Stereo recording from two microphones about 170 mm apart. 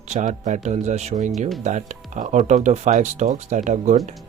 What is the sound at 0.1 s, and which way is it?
Speech, 45° right (ahead or behind).